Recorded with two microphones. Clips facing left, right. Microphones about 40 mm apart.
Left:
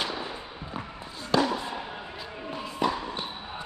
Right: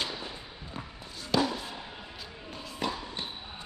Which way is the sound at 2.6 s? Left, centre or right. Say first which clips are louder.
Left 6 dB; centre.